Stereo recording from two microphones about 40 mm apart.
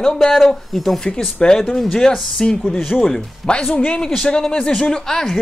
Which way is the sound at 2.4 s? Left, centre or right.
Centre.